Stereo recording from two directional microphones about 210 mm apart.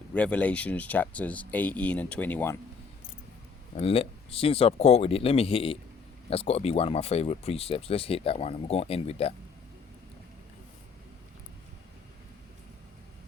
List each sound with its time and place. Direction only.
0.1 s speech: 5° left (ahead or behind)
3.8 s speech: 30° left (ahead or behind)